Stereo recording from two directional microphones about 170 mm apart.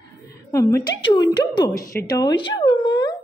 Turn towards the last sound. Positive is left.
turn(degrees=25)  # may be behind; listen again after turning